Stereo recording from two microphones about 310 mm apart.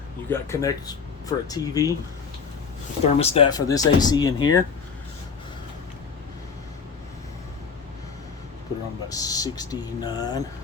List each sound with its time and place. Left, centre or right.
0.3 s speech: centre
3.0 s speech: centre
9.0 s speech: centre